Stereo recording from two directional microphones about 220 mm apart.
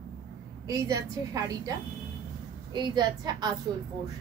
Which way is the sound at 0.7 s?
15° right (ahead or behind).